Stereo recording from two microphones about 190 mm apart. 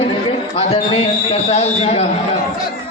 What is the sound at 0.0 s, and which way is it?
A man's voice, 30° left (ahead or behind).